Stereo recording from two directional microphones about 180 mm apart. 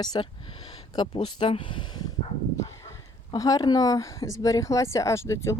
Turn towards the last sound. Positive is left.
turn(degrees=15)  # may be behind; listen again after turning